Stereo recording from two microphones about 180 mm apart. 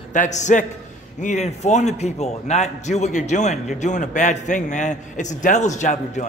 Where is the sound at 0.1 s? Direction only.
40° left (ahead or behind).